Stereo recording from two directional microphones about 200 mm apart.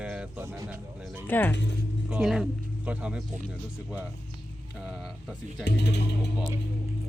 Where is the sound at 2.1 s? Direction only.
5° right (ahead or behind).